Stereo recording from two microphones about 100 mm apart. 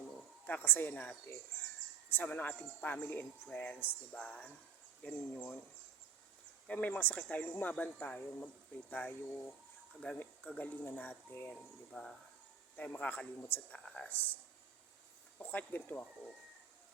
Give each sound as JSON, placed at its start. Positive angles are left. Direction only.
{"t": 0.4, "sound": "speech", "side_deg": 20}
{"t": 6.7, "sound": "speech", "side_deg": 15}
{"t": 11.9, "sound": "speech", "side_deg": 5}
{"t": 15.4, "sound": "speech", "side_deg": 20}